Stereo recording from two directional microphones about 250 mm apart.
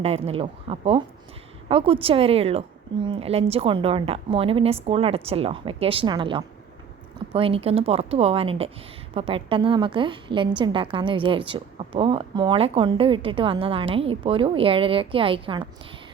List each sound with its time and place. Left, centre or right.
0.0 s a woman's voice: right